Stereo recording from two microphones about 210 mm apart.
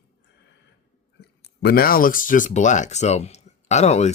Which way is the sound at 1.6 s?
45° left (ahead or behind).